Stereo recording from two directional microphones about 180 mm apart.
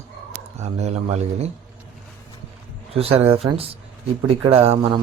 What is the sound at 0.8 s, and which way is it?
Speech, 35° right (ahead or behind).